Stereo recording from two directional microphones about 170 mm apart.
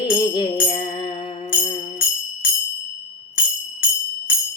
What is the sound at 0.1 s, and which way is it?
Music, 30° left (ahead or behind).